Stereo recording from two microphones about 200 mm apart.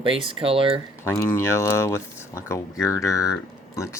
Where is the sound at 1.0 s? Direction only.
15° left (ahead or behind).